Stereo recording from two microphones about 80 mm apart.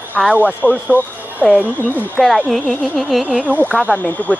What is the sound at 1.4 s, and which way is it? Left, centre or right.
Speech, centre.